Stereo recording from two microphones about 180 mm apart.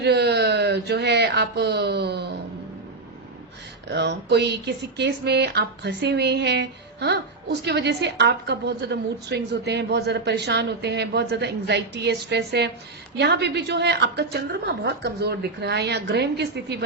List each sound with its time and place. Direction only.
0.0 s speech: 65° right (ahead or behind)
3.8 s speech: 70° right (ahead or behind)